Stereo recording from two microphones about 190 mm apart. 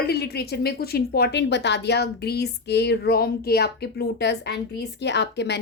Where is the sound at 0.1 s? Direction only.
60° left (ahead or behind).